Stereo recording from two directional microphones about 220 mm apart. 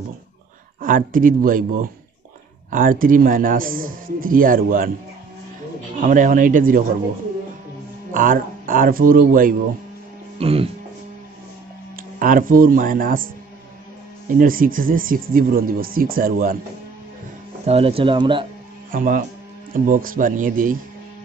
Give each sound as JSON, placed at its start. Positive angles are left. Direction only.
{"t": 0.7, "sound": "a man's voice", "side_deg": -40}
{"t": 5.9, "sound": "a man's voice", "side_deg": -35}
{"t": 8.1, "sound": "a man's voice", "side_deg": -40}
{"t": 10.4, "sound": "speech", "side_deg": -25}
{"t": 12.2, "sound": "a man's voice", "side_deg": -40}
{"t": 14.4, "sound": "a man's voice", "side_deg": -40}
{"t": 17.6, "sound": "speech", "side_deg": -25}
{"t": 18.9, "sound": "a man's voice", "side_deg": -40}